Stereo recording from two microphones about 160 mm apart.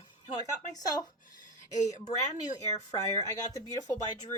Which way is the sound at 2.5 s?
20° left (ahead or behind).